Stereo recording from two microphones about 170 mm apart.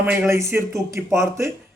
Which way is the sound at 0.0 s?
10° right (ahead or behind).